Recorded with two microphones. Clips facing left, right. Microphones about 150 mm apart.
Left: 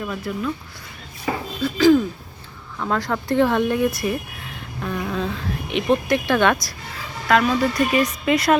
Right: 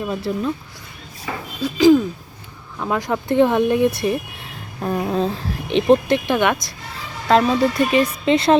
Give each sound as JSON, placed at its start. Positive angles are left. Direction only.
{"t": 0.0, "sound": "speech", "side_deg": -30}
{"t": 1.6, "sound": "speech", "side_deg": -15}
{"t": 6.2, "sound": "speech", "side_deg": -15}
{"t": 7.3, "sound": "speech", "side_deg": -30}